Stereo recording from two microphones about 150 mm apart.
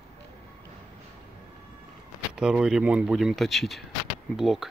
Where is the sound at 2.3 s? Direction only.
5° right (ahead or behind).